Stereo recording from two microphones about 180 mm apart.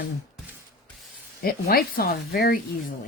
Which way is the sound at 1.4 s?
55° left (ahead or behind).